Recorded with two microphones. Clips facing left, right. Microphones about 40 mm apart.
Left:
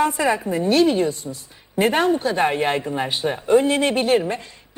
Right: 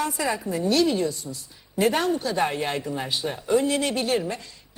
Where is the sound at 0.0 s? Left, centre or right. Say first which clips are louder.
Left 7 dB; left.